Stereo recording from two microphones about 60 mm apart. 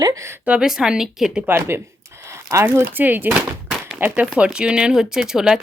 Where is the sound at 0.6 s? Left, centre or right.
Centre.